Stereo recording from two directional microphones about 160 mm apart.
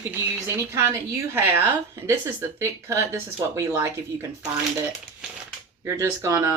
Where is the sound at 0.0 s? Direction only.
15° right (ahead or behind).